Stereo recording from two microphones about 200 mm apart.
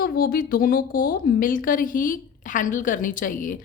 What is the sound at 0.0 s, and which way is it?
A woman's voice, 50° left (ahead or behind).